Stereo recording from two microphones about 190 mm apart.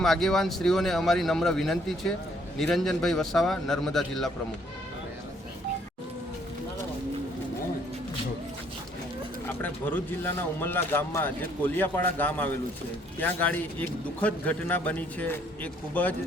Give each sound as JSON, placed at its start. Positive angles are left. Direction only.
{"t": 0.0, "sound": "a man's voice", "side_deg": 0}
{"t": 9.6, "sound": "speech", "side_deg": 10}